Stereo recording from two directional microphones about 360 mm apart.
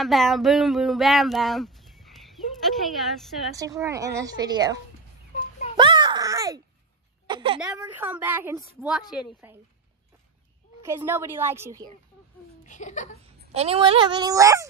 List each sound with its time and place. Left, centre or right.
0.0 s a sound: centre
5.8 s a sound: centre
7.2 s a woman's voice: centre
10.9 s speech: centre
12.6 s speech: centre
13.4 s speech: centre